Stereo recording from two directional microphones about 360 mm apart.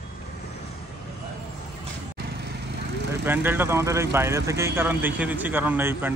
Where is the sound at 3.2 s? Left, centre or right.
Centre.